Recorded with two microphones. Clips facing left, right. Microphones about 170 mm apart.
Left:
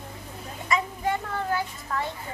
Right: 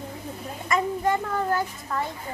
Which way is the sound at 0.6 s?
50° right (ahead or behind).